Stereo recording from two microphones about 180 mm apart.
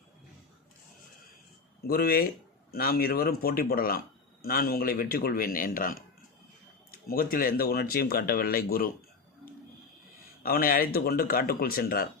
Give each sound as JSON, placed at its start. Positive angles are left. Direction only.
{"t": 1.9, "sound": "speech", "side_deg": 55}
{"t": 7.1, "sound": "speech", "side_deg": 55}
{"t": 10.4, "sound": "speech", "side_deg": 55}